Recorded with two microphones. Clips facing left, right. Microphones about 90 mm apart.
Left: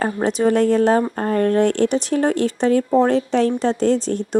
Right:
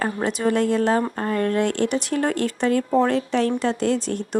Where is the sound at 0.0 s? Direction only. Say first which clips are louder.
Left 4 dB; 30° left (ahead or behind).